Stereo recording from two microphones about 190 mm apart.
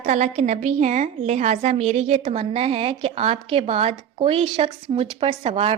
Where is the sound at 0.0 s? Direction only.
40° right (ahead or behind).